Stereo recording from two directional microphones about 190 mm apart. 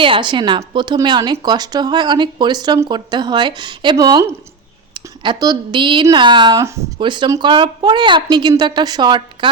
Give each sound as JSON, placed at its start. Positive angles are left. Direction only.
{"t": 0.0, "sound": "speech", "side_deg": -25}